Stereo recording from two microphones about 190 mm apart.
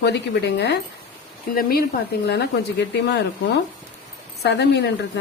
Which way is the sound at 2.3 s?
60° left (ahead or behind).